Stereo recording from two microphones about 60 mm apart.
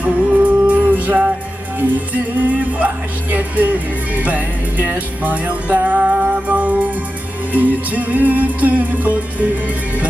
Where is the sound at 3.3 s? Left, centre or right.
Right.